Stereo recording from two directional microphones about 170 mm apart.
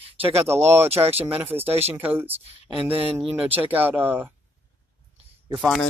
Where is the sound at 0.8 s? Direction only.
35° right (ahead or behind).